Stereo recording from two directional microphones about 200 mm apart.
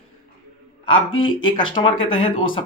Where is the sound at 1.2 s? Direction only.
25° left (ahead or behind).